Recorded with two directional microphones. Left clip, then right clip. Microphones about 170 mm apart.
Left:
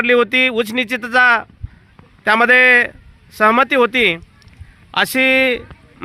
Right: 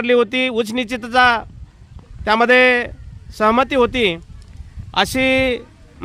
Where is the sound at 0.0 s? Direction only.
15° right (ahead or behind).